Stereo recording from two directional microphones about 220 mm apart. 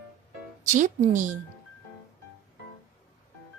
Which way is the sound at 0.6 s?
35° right (ahead or behind).